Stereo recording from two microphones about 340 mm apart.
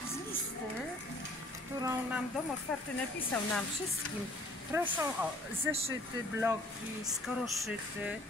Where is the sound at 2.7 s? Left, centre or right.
Centre.